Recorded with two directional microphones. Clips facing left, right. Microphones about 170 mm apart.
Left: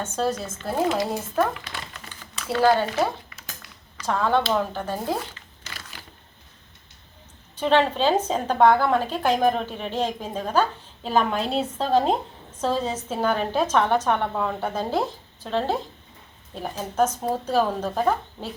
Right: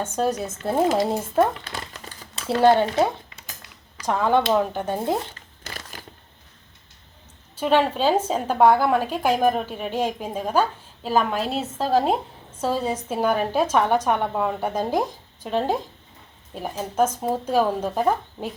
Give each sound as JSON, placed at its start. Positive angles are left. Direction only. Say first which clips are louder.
{"t": 0.0, "sound": "a woman's voice", "louder": "right 2 dB", "side_deg": -15}
{"t": 1.5, "sound": "crumpling", "louder": "right 2 dB", "side_deg": -35}
{"t": 2.5, "sound": "a woman's voice", "louder": "right 3 dB", "side_deg": -25}
{"t": 7.5, "sound": "a woman's voice", "louder": "even", "side_deg": -5}